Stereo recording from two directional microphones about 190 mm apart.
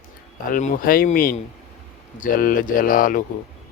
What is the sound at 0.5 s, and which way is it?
A man's voice, 45° left (ahead or behind).